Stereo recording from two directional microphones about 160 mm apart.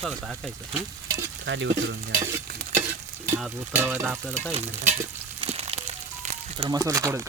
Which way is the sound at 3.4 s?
10° right (ahead or behind).